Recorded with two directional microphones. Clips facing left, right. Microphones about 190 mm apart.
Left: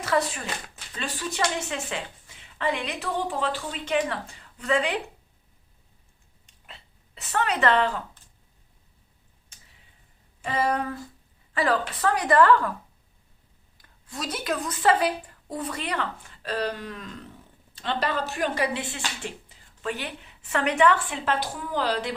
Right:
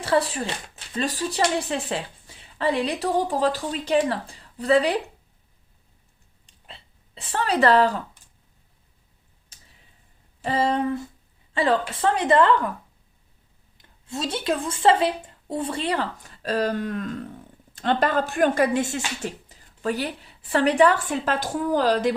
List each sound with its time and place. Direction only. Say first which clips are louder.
0.0 s a woman's voice: right 3 dB; 30° right (ahead or behind)
6.4 s a sound: right 3 dB; 30° right (ahead or behind)
10.4 s a woman's voice: right 3 dB; 30° right (ahead or behind)
13.7 s a woman's voice: right 5 dB; 25° right (ahead or behind); by 22.1 s 45° right (ahead or behind)